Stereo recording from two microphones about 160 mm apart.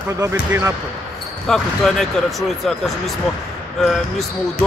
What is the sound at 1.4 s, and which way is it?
Speech, centre (ahead or behind).